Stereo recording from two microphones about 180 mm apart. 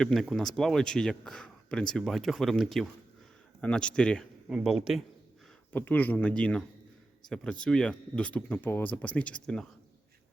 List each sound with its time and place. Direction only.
0.0 s a man's voice: centre (ahead or behind)
5.7 s speech: 10° left (ahead or behind)